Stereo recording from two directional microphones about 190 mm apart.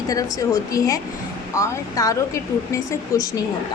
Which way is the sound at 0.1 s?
20° left (ahead or behind).